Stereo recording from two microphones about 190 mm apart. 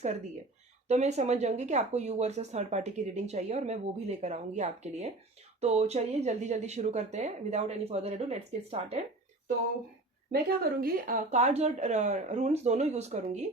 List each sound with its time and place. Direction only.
0.9 s a woman's voice: 35° right (ahead or behind)
10.6 s a woman's voice: 50° right (ahead or behind)